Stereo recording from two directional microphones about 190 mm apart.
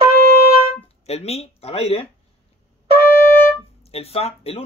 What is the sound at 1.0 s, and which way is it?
Speech, 35° left (ahead or behind).